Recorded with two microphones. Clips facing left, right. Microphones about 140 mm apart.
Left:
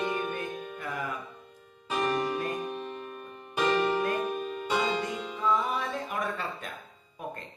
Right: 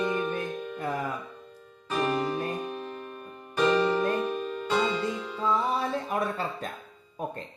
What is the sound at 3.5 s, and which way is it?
Music, 10° left (ahead or behind).